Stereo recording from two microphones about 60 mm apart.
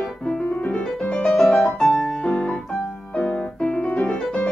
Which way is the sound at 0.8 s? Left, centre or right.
Centre.